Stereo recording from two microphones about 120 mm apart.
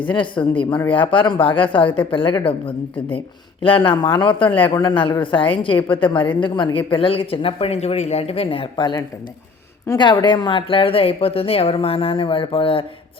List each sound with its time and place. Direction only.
0.0 s a woman's voice: 45° left (ahead or behind)
10.0 s a woman's voice: 40° left (ahead or behind)